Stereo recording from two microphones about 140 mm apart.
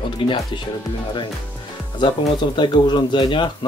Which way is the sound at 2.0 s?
35° left (ahead or behind).